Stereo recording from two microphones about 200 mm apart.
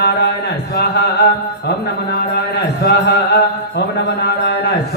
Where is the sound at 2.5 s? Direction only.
55° left (ahead or behind).